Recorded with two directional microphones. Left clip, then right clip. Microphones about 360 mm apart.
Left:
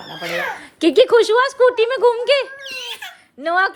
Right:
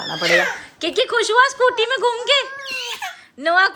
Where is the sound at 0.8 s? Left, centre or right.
Centre.